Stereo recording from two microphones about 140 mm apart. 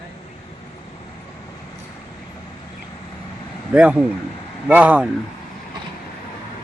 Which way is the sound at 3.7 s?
10° right (ahead or behind).